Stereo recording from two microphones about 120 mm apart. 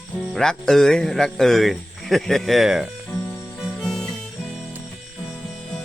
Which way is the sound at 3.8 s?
5° left (ahead or behind).